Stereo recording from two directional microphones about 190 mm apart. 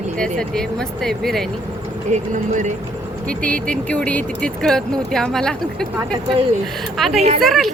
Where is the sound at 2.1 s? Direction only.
40° right (ahead or behind).